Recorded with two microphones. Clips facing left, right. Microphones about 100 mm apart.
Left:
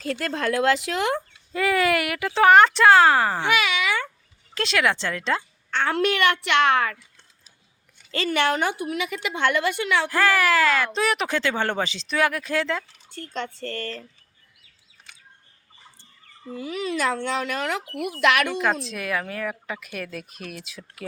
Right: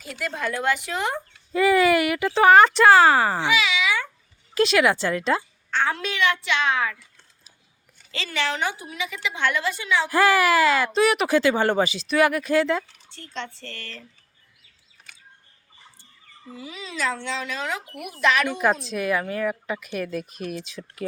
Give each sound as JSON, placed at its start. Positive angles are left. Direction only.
{"t": 1.5, "sound": "speech", "side_deg": 0}
{"t": 3.5, "sound": "a sound", "side_deg": 55}
{"t": 4.5, "sound": "speech", "side_deg": -5}
{"t": 5.7, "sound": "speech", "side_deg": 60}
{"t": 8.1, "sound": "speech", "side_deg": 50}
{"t": 10.1, "sound": "speech", "side_deg": -10}
{"t": 13.1, "sound": "speech", "side_deg": 45}
{"t": 16.5, "sound": "speech", "side_deg": 55}
{"t": 18.5, "sound": "speech", "side_deg": 0}